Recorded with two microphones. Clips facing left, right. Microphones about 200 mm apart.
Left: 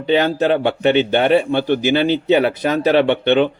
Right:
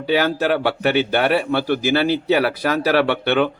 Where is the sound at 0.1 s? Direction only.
25° left (ahead or behind).